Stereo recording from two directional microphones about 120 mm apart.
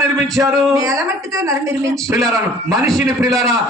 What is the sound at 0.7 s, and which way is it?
A woman's voice, 25° right (ahead or behind).